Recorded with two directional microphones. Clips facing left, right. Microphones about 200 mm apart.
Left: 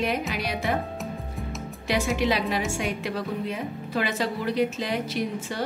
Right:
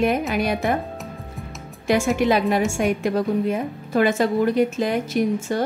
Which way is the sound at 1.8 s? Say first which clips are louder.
Right 6 dB; 50° right (ahead or behind).